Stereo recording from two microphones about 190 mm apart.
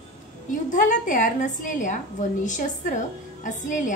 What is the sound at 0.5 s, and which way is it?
A woman's voice, 40° left (ahead or behind).